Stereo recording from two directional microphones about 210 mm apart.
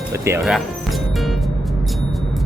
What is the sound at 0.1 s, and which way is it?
Speech, 10° right (ahead or behind).